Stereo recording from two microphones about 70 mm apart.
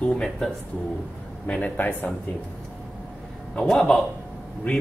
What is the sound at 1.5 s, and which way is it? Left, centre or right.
Speech, left.